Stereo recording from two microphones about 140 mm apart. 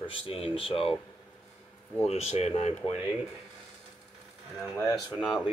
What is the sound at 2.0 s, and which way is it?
Speech, 50° left (ahead or behind).